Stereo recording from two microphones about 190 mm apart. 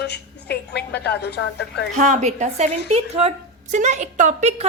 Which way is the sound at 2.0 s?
40° right (ahead or behind).